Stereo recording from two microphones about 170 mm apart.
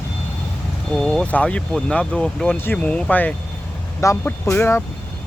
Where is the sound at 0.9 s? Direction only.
Centre (ahead or behind).